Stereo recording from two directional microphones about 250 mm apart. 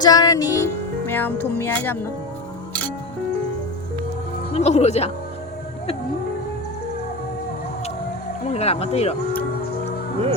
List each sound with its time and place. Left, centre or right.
0.0 s music: centre
4.5 s speech: left
8.4 s speech: left